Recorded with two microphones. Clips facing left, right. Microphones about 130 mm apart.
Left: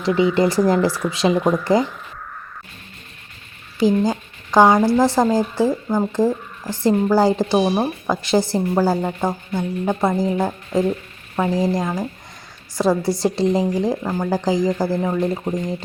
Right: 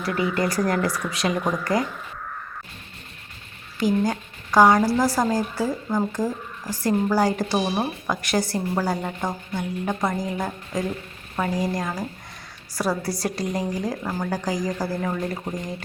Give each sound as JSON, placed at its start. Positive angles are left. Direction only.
{"t": 0.0, "sound": "speech", "side_deg": 25}
{"t": 3.8, "sound": "a woman's voice", "side_deg": 25}